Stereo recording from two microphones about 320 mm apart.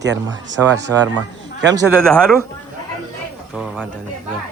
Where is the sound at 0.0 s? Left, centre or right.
Right.